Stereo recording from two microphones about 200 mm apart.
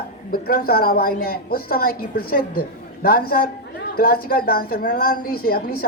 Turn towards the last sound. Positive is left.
turn(degrees=50)  # may be behind; listen again after turning